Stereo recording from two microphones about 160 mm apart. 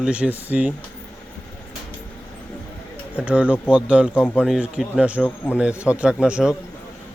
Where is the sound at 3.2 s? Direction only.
10° right (ahead or behind).